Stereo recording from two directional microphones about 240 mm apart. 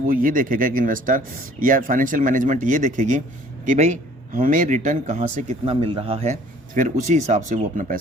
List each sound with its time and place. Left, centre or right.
0.1 s speech: right
4.3 s speech: right